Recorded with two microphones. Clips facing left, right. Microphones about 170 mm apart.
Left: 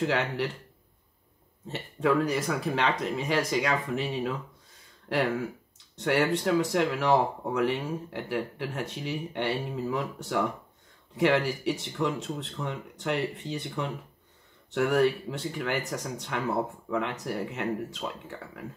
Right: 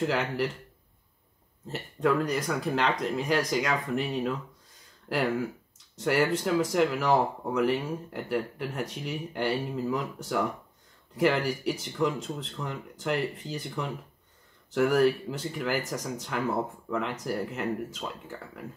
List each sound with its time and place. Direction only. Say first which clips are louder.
0.0 s speech: even; centre (ahead or behind)
1.7 s speech: even; centre (ahead or behind)